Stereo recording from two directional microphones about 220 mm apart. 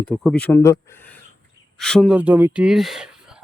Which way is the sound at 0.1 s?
Centre (ahead or behind).